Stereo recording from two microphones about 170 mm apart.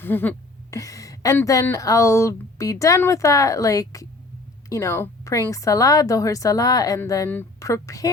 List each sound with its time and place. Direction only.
0.0 s speech: 10° left (ahead or behind)